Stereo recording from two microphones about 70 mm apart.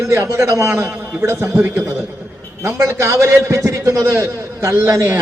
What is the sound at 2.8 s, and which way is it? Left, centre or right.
A man's voice, right.